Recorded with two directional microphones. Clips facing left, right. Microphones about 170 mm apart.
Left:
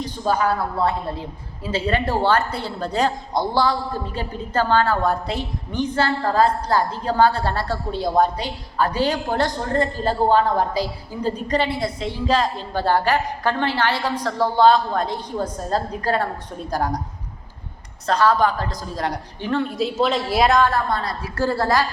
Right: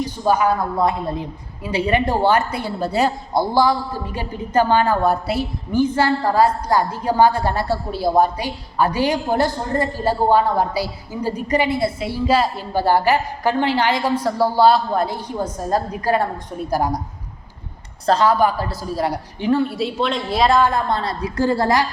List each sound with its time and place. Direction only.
0.0 s a woman's voice: 10° right (ahead or behind)
18.2 s a woman's voice: 10° right (ahead or behind)
20.6 s a woman's voice: 15° right (ahead or behind)
20.9 s a woman's voice: 25° right (ahead or behind)